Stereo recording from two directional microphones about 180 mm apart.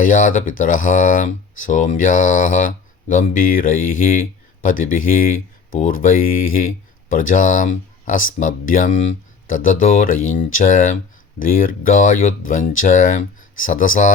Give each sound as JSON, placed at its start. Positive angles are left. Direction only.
{"t": 0.0, "sound": "speech", "side_deg": 45}